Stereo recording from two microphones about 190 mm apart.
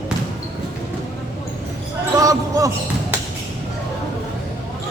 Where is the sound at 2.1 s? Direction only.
15° right (ahead or behind).